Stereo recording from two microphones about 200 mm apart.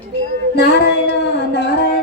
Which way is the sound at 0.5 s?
55° left (ahead or behind).